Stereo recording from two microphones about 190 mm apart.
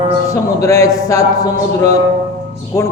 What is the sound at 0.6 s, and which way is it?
Speech, 15° left (ahead or behind).